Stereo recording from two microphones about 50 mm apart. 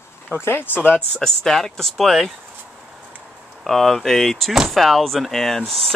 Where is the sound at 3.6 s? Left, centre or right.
Centre.